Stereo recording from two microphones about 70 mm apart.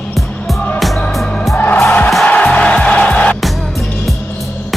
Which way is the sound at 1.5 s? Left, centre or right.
Left.